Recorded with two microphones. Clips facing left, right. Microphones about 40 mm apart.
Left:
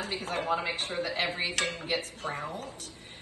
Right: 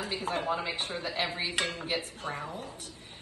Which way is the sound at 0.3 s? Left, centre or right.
Left.